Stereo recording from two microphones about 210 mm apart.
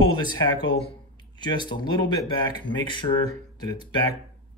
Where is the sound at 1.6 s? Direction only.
20° left (ahead or behind).